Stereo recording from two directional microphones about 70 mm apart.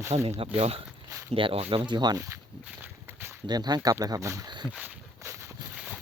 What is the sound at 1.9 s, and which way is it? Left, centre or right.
Speech, right.